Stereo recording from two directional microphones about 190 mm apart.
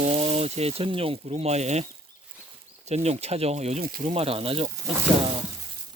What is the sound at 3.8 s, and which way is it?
Speech, 50° right (ahead or behind).